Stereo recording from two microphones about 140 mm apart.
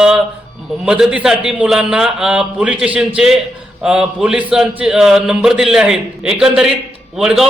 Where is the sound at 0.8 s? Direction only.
5° right (ahead or behind).